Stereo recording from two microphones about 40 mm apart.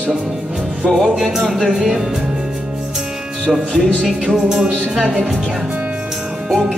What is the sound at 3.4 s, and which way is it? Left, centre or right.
A woman's voice, centre.